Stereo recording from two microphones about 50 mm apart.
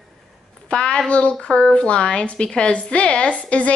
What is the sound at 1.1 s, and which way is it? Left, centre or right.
A woman's voice, left.